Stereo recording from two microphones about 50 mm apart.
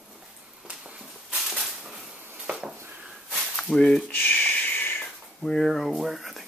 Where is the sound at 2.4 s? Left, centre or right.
Centre.